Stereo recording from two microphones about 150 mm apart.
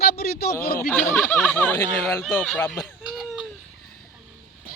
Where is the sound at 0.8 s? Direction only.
15° left (ahead or behind).